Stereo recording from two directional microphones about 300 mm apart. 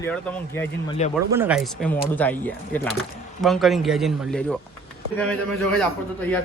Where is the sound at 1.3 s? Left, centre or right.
Centre.